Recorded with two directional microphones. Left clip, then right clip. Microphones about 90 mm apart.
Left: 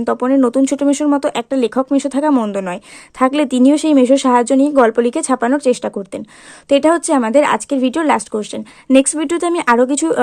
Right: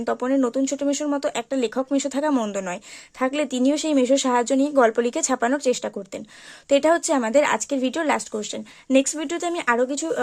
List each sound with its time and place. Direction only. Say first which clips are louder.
0.0 s speech: left 8 dB; 25° left (ahead or behind)
0.4 s speech: left 9 dB; 50° left (ahead or behind)
1.0 s speech: left 8 dB; 35° left (ahead or behind)
3.2 s speech: left 9 dB; 35° left (ahead or behind)
9.9 s speech: left 10 dB; 60° left (ahead or behind)